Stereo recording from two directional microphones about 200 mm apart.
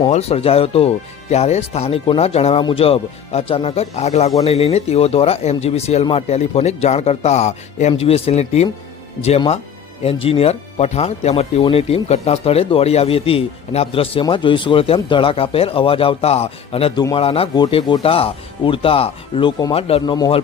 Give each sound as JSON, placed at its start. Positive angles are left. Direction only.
{"t": 0.1, "sound": "speech", "side_deg": 30}